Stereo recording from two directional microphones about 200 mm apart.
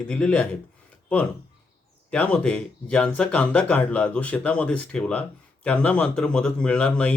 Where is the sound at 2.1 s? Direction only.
5° left (ahead or behind).